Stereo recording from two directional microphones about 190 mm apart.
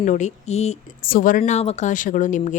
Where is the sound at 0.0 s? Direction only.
40° left (ahead or behind).